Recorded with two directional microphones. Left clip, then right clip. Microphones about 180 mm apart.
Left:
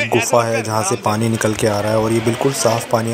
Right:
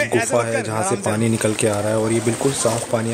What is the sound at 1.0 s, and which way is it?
Speech, centre (ahead or behind).